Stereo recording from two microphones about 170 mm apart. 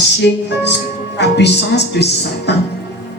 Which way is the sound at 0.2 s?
90° left.